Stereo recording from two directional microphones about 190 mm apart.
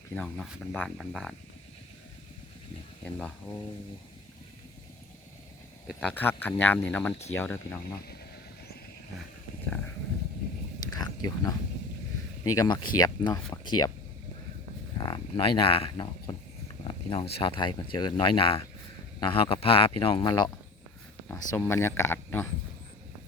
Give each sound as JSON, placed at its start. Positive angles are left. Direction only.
{"t": 0.1, "sound": "speech", "side_deg": 5}
{"t": 3.0, "sound": "speech", "side_deg": 5}
{"t": 5.9, "sound": "speech", "side_deg": 5}
{"t": 10.9, "sound": "a sound", "side_deg": 20}
{"t": 12.4, "sound": "speech", "side_deg": 15}
{"t": 14.9, "sound": "speech", "side_deg": 25}
{"t": 16.8, "sound": "a sound", "side_deg": 25}
{"t": 17.3, "sound": "speech", "side_deg": 25}
{"t": 21.5, "sound": "speech", "side_deg": 15}